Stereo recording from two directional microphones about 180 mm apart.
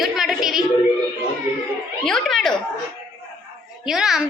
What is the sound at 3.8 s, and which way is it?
Speech, centre (ahead or behind).